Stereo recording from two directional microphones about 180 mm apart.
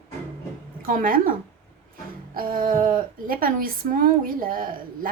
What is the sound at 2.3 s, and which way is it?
A woman's voice, 50° right (ahead or behind).